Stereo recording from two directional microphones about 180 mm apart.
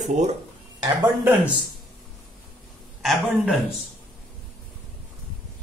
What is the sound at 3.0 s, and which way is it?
Speech, centre (ahead or behind).